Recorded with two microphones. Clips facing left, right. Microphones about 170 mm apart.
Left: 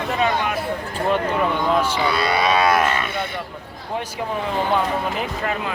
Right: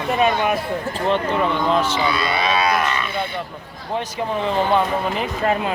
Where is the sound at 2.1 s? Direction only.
40° left (ahead or behind).